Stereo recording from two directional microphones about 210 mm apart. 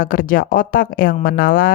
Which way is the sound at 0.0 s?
40° left (ahead or behind).